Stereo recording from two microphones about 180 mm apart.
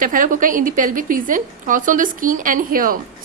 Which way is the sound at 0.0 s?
50° right (ahead or behind).